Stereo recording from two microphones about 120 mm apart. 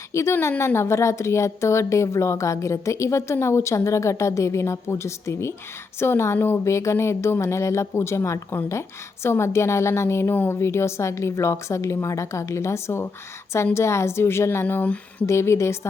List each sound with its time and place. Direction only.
0.1 s speech: 25° left (ahead or behind)